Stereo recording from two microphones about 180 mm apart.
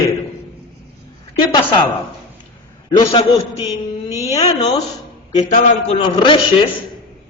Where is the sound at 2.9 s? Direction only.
30° left (ahead or behind).